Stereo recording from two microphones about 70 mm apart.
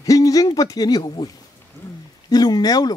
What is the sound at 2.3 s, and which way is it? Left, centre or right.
Speech, left.